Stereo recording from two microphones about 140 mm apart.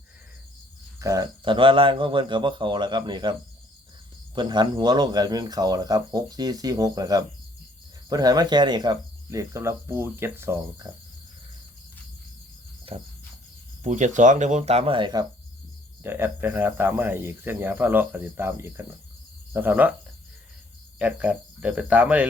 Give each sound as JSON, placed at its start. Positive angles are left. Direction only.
{"t": 0.9, "sound": "speech", "side_deg": -25}
{"t": 4.4, "sound": "speech", "side_deg": -30}
{"t": 12.9, "sound": "cricket", "side_deg": -45}
{"t": 13.8, "sound": "speech", "side_deg": -60}
{"t": 16.0, "sound": "speech", "side_deg": -15}
{"t": 21.0, "sound": "speech", "side_deg": -10}